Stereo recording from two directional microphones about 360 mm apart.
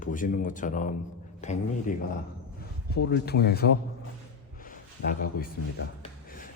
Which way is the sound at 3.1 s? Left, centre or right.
Left.